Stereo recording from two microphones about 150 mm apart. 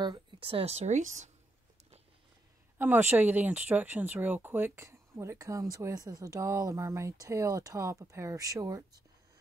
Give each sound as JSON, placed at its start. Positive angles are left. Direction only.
{"t": 0.0, "sound": "speech", "side_deg": -35}
{"t": 2.8, "sound": "speech", "side_deg": -15}